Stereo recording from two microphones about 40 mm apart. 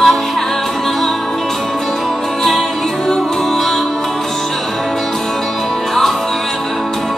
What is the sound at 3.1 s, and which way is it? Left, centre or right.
Music, centre.